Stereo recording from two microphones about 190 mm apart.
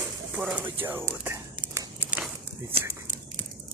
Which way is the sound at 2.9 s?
10° right (ahead or behind).